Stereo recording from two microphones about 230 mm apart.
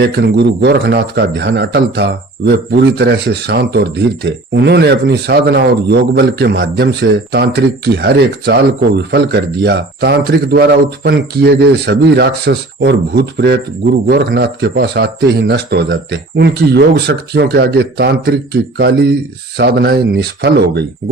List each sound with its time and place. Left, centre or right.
0.0 s a man's voice: right